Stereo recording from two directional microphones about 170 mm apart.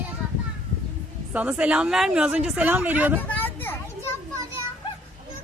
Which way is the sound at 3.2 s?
10° left (ahead or behind).